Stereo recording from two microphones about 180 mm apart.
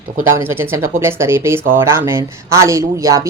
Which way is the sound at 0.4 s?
10° right (ahead or behind).